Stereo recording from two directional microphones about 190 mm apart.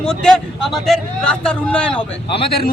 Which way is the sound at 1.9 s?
25° left (ahead or behind).